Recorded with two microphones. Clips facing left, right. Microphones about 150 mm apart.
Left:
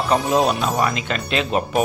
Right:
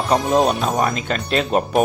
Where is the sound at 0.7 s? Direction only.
45° right (ahead or behind).